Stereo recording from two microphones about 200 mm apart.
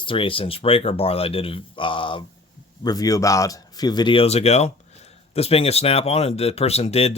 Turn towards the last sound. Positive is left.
turn(degrees=30)  # may be behind; listen again after turning